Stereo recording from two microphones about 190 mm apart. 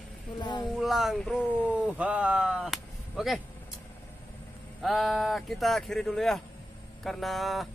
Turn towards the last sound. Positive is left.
turn(degrees=0)  # may be behind; listen again after turning